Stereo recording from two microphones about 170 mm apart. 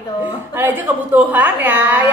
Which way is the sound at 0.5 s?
10° right (ahead or behind).